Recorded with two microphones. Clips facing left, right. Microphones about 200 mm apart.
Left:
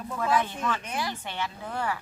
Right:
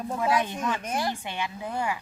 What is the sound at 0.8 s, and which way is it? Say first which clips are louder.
Speech: right 4 dB; 45° right (ahead or behind).